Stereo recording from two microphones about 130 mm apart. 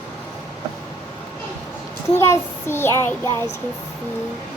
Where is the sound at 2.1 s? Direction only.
20° left (ahead or behind).